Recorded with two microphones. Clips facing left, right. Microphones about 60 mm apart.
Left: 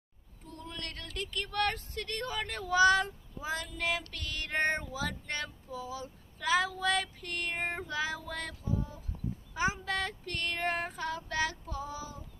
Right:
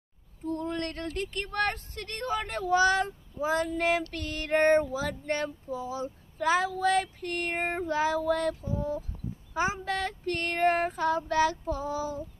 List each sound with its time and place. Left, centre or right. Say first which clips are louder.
0.5 s speech: right 12 dB; right